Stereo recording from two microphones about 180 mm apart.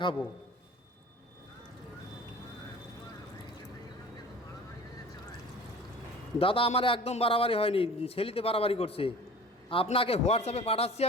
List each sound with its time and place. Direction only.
6.4 s a man's voice: 30° left (ahead or behind)